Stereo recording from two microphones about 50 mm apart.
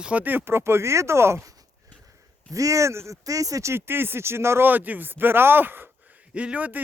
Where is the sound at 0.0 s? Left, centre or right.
Right.